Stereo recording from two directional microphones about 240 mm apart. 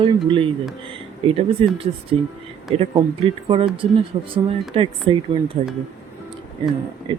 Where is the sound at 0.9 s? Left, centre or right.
Right.